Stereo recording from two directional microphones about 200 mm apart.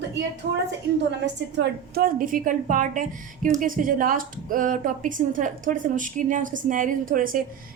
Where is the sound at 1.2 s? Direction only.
60° right (ahead or behind).